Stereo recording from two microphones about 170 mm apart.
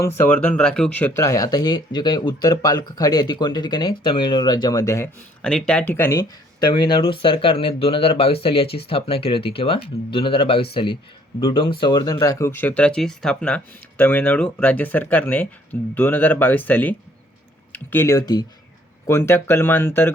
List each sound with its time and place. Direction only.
0.2 s speech: 10° left (ahead or behind)
5.4 s speech: 5° left (ahead or behind)